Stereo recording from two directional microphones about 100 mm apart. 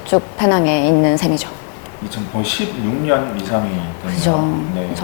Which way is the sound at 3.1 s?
25° left (ahead or behind).